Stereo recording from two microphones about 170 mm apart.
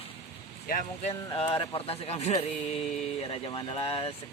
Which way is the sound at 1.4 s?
30° left (ahead or behind).